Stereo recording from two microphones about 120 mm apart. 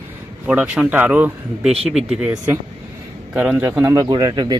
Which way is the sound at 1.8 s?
Centre (ahead or behind).